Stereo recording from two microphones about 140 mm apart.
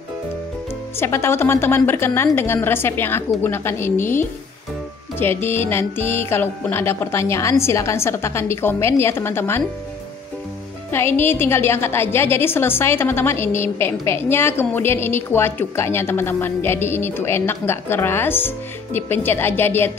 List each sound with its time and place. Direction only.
0.9 s a woman's voice: 20° left (ahead or behind)
10.9 s a woman's voice: 15° left (ahead or behind)